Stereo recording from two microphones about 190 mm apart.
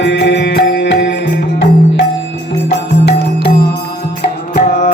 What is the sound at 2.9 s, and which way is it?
Music, 55° left (ahead or behind).